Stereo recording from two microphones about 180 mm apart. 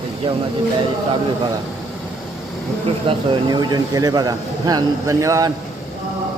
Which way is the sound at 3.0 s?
25° right (ahead or behind).